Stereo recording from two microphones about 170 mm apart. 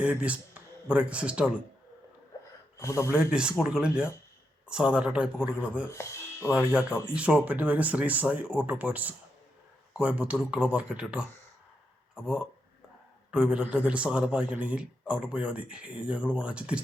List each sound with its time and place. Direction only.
0.0 s speech: 5° right (ahead or behind)
2.7 s a man's voice: 15° left (ahead or behind)
3.1 s a man's voice: 5° right (ahead or behind)
5.9 s music: 15° left (ahead or behind)
6.5 s a man's voice: 5° right (ahead or behind)